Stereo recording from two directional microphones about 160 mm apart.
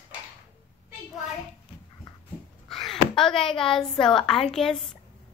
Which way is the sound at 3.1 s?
5° left (ahead or behind).